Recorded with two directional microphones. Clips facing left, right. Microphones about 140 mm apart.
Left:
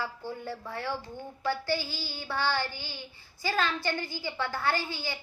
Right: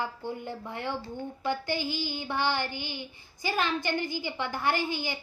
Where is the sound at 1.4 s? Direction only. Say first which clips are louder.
Left 1 dB; 20° right (ahead or behind).